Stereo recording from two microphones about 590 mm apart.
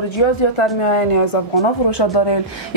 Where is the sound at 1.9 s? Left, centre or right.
Left.